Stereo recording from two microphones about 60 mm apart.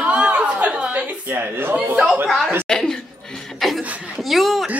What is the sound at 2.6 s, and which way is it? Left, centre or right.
Speech, centre.